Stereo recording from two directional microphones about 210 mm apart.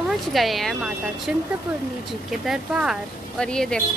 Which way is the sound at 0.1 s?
Centre (ahead or behind).